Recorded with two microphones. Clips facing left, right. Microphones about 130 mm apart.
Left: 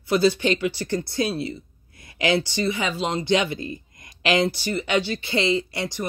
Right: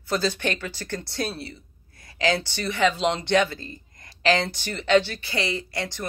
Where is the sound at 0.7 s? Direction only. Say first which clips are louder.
Left 6 dB; 50° right (ahead or behind).